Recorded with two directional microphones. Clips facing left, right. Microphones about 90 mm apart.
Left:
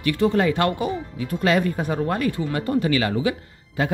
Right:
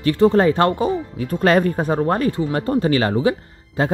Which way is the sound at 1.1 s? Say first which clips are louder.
Right 4 dB; 45° right (ahead or behind).